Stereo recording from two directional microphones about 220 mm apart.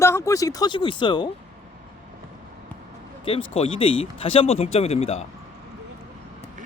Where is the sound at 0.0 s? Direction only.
15° left (ahead or behind).